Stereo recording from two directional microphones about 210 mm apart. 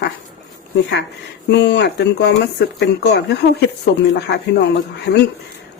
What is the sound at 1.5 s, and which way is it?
Speech, 55° left (ahead or behind).